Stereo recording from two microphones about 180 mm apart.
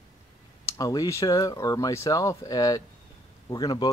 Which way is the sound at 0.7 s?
20° left (ahead or behind).